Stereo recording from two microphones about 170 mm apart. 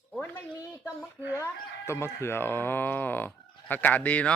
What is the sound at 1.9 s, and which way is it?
Speech, 15° left (ahead or behind).